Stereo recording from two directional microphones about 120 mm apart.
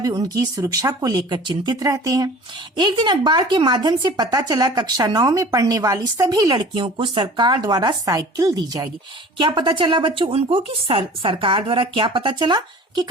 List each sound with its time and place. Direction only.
0.0 s speech: 30° right (ahead or behind)
9.4 s a woman's voice: 40° right (ahead or behind)